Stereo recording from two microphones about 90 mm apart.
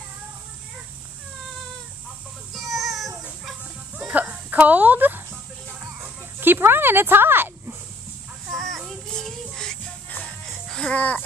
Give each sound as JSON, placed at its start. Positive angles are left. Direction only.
{"t": 2.5, "sound": "child singing", "side_deg": 0}
{"t": 3.2, "sound": "a sound", "side_deg": -10}
{"t": 4.1, "sound": "a sound", "side_deg": -15}
{"t": 8.5, "sound": "child singing", "side_deg": 5}
{"t": 10.0, "sound": "music", "side_deg": 20}
{"t": 10.5, "sound": "music", "side_deg": 5}
{"t": 10.9, "sound": "speech", "side_deg": 15}